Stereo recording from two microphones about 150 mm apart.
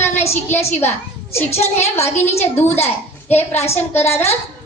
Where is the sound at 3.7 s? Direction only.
15° left (ahead or behind).